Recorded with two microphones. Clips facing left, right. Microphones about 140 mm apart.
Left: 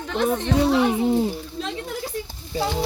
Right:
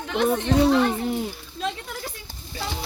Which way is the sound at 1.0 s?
30° left (ahead or behind).